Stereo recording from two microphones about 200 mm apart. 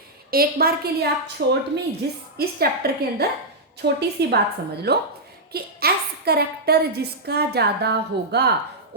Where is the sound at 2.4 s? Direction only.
50° right (ahead or behind).